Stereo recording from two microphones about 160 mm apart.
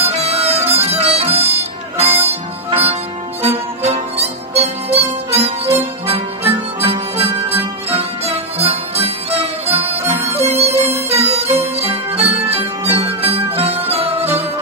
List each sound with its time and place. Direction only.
0.0 s music: 40° right (ahead or behind)
6.0 s harmonica: 40° right (ahead or behind)
8.0 s music: 40° right (ahead or behind)